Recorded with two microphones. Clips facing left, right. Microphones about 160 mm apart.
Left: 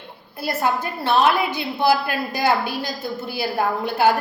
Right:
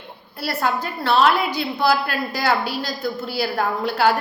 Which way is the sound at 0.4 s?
20° left (ahead or behind).